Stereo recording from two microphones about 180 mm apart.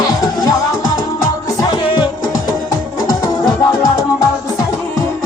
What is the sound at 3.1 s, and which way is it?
Music, 20° left (ahead or behind).